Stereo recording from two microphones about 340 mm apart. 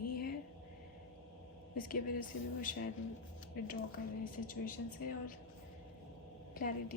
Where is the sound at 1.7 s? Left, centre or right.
Left.